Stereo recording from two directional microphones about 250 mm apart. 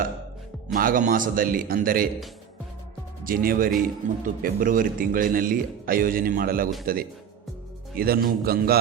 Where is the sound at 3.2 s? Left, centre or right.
Right.